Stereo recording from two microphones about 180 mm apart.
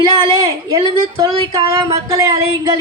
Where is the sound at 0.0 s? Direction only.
25° right (ahead or behind).